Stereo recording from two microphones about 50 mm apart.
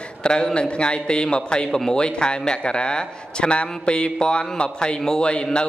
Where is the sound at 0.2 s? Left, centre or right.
Centre.